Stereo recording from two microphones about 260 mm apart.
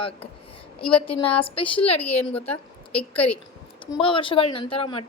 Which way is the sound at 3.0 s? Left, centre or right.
Centre.